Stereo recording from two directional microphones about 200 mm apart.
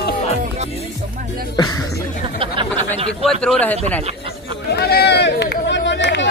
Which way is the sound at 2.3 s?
25° right (ahead or behind).